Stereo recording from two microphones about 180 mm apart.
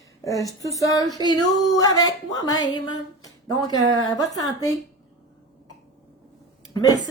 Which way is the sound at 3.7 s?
20° left (ahead or behind).